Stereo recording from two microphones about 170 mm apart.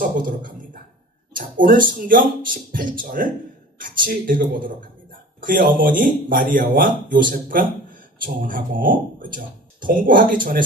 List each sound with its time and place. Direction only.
0.0 s speech: 50° right (ahead or behind)